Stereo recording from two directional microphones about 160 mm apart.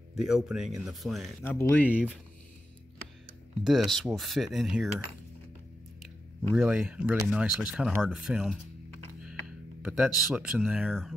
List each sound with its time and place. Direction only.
0.2 s speech: 5° right (ahead or behind)
1.4 s speech: 15° left (ahead or behind)
3.6 s speech: centre (ahead or behind)
6.5 s speech: 5° right (ahead or behind)